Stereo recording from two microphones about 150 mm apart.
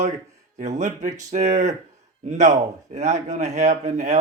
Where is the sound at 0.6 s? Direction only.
50° right (ahead or behind).